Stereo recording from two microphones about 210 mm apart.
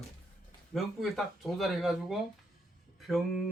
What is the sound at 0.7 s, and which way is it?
Speech, centre (ahead or behind).